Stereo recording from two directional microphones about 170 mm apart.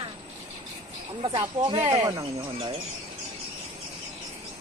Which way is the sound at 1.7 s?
30° right (ahead or behind).